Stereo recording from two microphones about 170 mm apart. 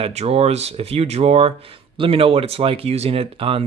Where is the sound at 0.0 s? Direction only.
40° right (ahead or behind).